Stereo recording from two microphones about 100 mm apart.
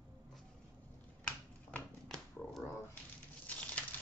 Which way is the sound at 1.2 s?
10° left (ahead or behind).